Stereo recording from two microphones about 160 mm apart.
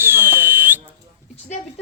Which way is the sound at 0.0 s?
15° right (ahead or behind).